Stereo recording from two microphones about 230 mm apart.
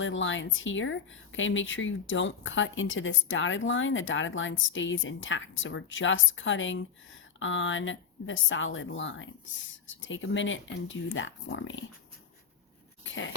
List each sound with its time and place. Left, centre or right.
0.0 s speech: left